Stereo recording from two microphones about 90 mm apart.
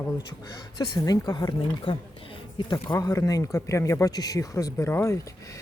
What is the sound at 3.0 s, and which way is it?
Speech, 40° left (ahead or behind).